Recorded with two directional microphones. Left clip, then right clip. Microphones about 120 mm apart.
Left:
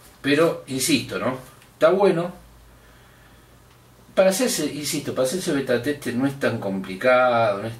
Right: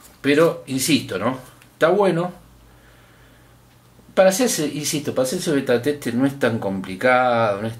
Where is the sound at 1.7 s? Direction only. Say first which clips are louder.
Even; 35° right (ahead or behind).